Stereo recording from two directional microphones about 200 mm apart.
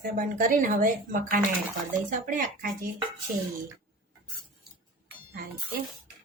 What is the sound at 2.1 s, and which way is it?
Speech, 40° right (ahead or behind).